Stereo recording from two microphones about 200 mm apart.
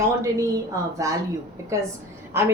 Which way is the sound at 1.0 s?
15° right (ahead or behind).